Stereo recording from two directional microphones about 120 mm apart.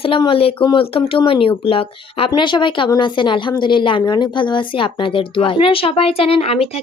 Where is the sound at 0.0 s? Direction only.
45° left (ahead or behind).